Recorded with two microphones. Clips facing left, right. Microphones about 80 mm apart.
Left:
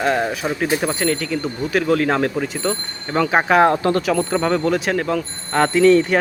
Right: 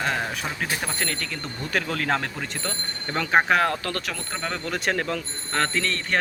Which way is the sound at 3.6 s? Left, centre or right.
Left.